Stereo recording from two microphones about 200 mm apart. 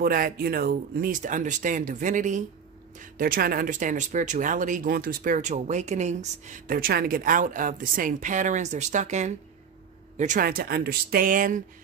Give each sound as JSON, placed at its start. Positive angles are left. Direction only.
{"t": 0.0, "sound": "speech", "side_deg": -45}